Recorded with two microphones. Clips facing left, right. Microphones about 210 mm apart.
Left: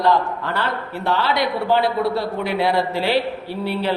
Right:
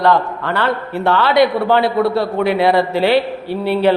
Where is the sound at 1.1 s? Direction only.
65° right (ahead or behind).